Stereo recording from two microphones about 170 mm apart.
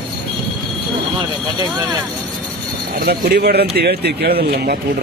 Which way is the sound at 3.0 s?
65° right (ahead or behind).